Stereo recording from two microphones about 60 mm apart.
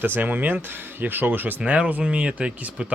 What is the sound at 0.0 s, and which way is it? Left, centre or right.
Speech, right.